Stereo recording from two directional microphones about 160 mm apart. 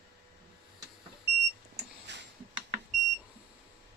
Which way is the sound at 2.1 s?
90° right.